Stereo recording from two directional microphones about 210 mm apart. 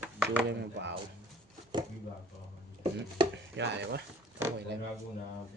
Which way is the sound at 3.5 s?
55° right (ahead or behind).